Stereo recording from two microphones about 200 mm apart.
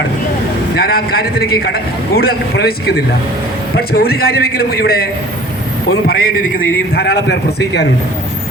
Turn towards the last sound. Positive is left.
turn(degrees=60)  # may be behind; listen again after turning